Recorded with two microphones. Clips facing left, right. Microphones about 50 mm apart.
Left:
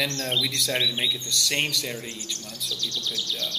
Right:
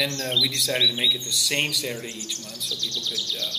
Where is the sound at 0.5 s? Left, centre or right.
Centre.